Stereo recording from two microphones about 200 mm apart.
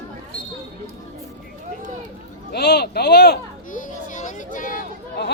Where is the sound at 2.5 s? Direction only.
55° left (ahead or behind).